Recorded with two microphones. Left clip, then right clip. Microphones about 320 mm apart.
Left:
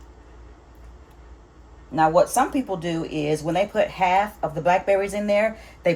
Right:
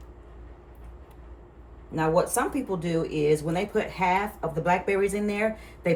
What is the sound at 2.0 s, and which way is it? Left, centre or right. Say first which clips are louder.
Speech: left 6 dB; centre.